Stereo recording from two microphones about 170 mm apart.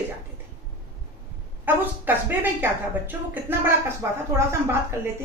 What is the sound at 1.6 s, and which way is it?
A woman's voice, 10° right (ahead or behind).